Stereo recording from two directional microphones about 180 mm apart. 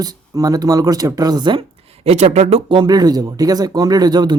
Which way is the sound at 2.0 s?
40° right (ahead or behind).